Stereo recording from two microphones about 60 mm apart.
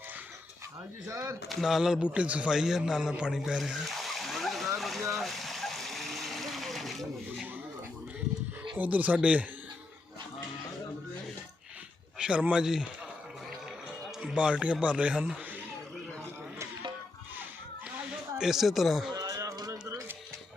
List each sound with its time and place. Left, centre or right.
1.0 s speech: right
1.5 s speech: centre
2.0 s speech: right
2.5 s a man's voice: centre
3.3 s a sound: centre
8.7 s speech: right
12.1 s speech: centre
12.6 s a man's voice: centre
14.2 s a man's voice: centre
18.3 s speech: centre
19.1 s music: right